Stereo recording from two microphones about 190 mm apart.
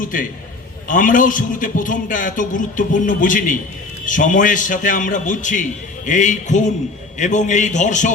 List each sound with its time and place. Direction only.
0.0 s a man's voice: 45° left (ahead or behind)